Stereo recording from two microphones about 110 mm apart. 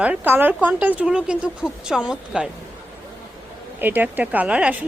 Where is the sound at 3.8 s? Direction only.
15° right (ahead or behind).